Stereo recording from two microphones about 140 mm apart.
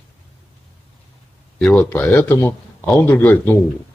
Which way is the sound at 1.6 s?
10° left (ahead or behind).